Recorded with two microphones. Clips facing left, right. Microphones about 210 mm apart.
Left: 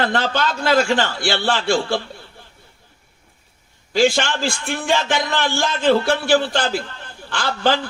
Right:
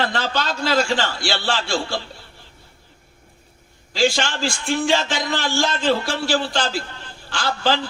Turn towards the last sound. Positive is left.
turn(degrees=55)  # may be behind; listen again after turning